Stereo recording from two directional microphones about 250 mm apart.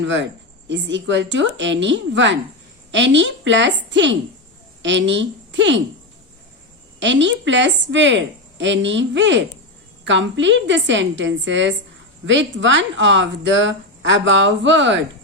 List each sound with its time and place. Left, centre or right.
0.0 s speech: right
7.0 s speech: right